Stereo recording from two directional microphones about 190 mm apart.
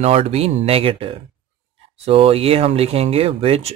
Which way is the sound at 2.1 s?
30° right (ahead or behind).